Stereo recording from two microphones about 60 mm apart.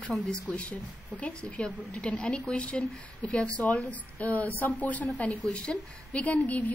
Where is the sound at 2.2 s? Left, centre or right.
Centre.